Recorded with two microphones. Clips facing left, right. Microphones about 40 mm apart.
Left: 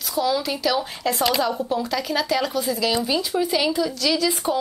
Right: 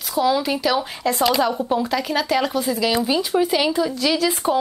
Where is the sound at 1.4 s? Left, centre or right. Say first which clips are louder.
Right 3 dB; centre.